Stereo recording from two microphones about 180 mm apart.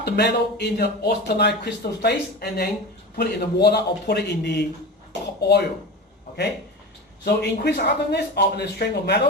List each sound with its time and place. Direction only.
0.0 s speech: 65° left (ahead or behind)
7.3 s speech: 65° left (ahead or behind)